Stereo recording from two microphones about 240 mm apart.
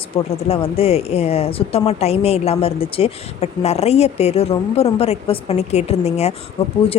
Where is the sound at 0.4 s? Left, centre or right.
Left.